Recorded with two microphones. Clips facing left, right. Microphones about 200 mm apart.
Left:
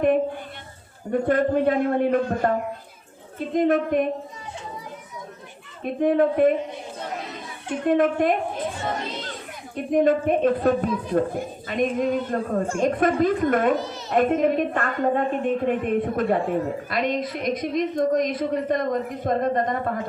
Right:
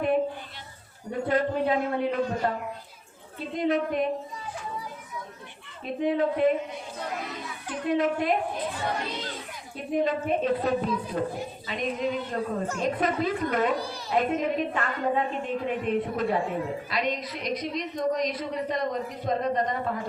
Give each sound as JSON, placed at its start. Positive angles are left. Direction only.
{"t": 1.3, "sound": "a woman's voice", "side_deg": 50}
{"t": 5.8, "sound": "a woman's voice", "side_deg": 50}
{"t": 7.9, "sound": "a woman's voice", "side_deg": 50}
{"t": 9.7, "sound": "a woman's voice", "side_deg": 50}
{"t": 13.7, "sound": "a child's voice", "side_deg": 20}
{"t": 14.1, "sound": "a woman's voice", "side_deg": 50}